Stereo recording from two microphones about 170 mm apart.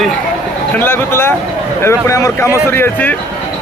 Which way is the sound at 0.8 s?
15° left (ahead or behind).